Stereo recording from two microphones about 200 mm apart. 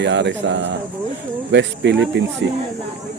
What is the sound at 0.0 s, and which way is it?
Speech, 60° right (ahead or behind).